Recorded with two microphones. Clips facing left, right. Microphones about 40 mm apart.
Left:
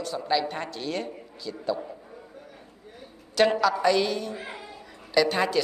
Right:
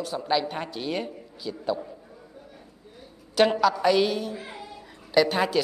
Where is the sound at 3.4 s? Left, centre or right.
Centre.